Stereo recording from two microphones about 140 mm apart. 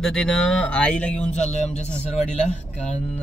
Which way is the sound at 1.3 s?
55° left (ahead or behind).